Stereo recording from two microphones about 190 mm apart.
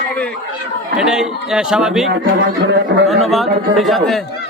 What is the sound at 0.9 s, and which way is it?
A man's voice, 5° right (ahead or behind).